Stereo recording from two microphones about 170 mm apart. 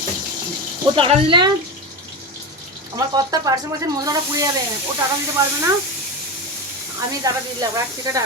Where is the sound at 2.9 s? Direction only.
20° right (ahead or behind).